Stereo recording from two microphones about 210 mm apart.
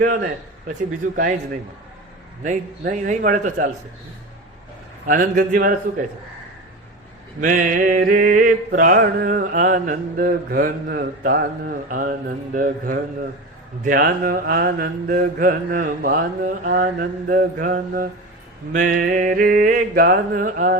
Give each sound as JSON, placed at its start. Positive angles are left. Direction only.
{"t": 2.4, "sound": "mantra", "side_deg": -35}
{"t": 5.0, "sound": "mantra", "side_deg": -40}
{"t": 7.4, "sound": "mantra", "side_deg": -40}